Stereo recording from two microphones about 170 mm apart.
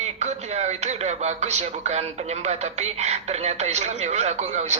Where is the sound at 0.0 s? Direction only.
40° right (ahead or behind).